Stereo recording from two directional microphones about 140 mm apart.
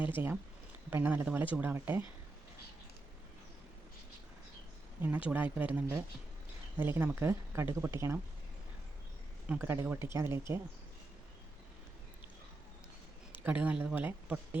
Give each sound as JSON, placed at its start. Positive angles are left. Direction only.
{"t": 0.0, "sound": "speech", "side_deg": -15}
{"t": 5.0, "sound": "speech", "side_deg": -10}
{"t": 9.5, "sound": "speech", "side_deg": -15}
{"t": 13.4, "sound": "speech", "side_deg": -10}